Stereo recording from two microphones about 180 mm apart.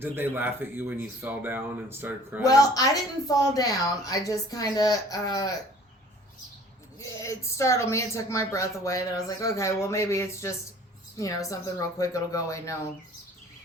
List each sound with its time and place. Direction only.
0.0 s speech: 10° right (ahead or behind)
2.4 s a woman's voice: 20° left (ahead or behind)
7.0 s a woman's voice: 15° left (ahead or behind)